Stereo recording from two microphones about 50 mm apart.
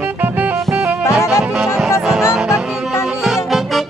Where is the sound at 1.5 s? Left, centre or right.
Centre.